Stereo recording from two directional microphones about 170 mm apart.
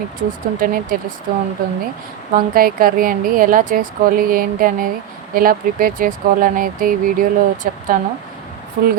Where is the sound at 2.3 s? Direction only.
60° right (ahead or behind).